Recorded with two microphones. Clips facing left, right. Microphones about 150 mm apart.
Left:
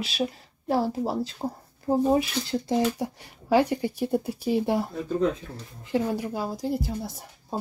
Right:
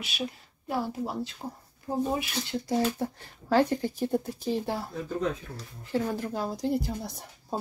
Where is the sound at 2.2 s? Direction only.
35° left (ahead or behind).